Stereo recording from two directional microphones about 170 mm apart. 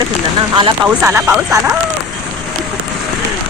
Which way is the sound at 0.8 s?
15° right (ahead or behind).